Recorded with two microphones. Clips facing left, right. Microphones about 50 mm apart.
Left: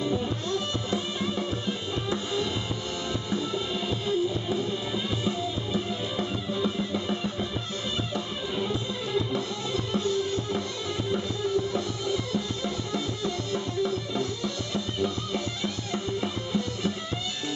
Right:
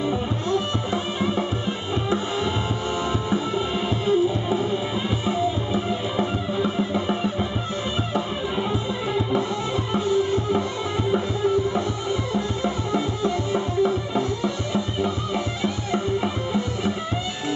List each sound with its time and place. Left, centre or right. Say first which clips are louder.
0.0 s music: right 4 dB; right
6.1 s music: right 5 dB; right
9.9 s music: right 7 dB; centre